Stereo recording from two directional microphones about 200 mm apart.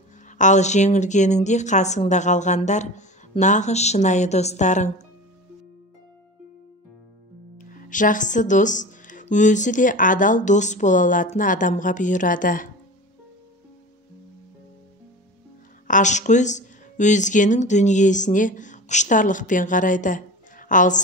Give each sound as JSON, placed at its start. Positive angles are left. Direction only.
{"t": 0.4, "sound": "speech", "side_deg": 35}
{"t": 7.5, "sound": "speech", "side_deg": 40}
{"t": 15.9, "sound": "speech", "side_deg": 35}